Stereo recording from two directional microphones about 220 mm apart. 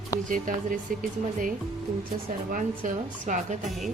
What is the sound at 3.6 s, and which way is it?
Speech, centre (ahead or behind).